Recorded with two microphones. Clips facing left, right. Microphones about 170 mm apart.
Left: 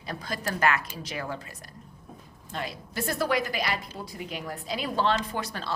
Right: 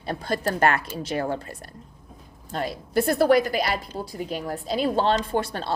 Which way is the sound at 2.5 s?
35° right (ahead or behind).